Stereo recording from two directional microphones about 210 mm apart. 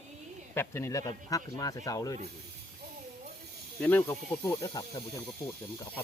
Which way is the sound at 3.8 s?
10° left (ahead or behind).